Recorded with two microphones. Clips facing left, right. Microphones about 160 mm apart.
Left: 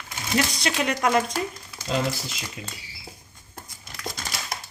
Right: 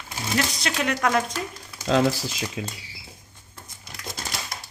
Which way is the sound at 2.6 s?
90° right.